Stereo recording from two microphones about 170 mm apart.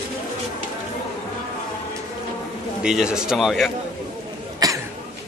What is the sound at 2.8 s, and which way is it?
Speech, 5° right (ahead or behind).